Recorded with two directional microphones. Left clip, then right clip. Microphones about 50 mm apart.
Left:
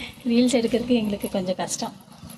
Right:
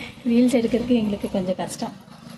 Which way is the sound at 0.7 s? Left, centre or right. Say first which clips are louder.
Right 1 dB; centre.